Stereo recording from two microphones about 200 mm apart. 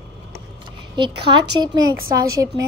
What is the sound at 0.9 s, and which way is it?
A woman's voice, 25° right (ahead or behind).